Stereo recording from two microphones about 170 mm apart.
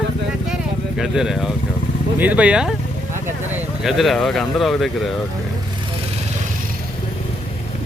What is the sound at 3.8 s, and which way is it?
Speech, centre (ahead or behind).